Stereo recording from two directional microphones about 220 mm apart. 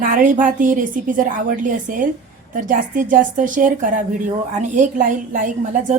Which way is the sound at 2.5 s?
35° right (ahead or behind).